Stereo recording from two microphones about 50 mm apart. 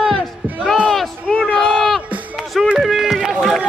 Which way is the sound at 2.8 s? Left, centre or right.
Centre.